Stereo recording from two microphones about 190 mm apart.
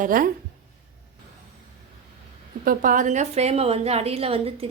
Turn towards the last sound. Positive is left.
turn(degrees=-30)  # may be behind; listen again after turning